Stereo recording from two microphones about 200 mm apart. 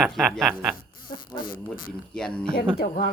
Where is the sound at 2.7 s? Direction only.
45° left (ahead or behind).